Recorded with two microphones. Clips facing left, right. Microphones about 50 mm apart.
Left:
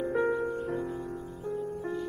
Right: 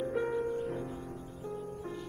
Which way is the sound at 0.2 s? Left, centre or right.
Left.